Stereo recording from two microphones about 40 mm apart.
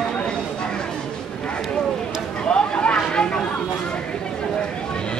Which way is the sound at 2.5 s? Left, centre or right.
Left.